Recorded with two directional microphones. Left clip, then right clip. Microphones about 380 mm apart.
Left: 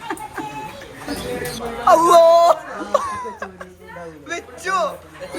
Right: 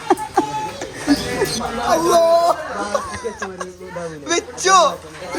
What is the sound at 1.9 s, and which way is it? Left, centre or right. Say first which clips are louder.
Speech: left 4 dB; centre.